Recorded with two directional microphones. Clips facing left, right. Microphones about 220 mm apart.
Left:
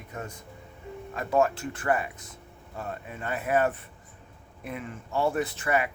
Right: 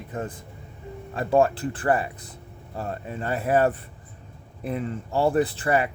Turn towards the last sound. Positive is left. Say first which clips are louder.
# right 5 dB
turn(degrees=-35)  # may be behind; listen again after turning